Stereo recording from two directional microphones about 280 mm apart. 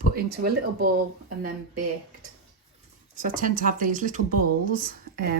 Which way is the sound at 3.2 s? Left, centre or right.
Right.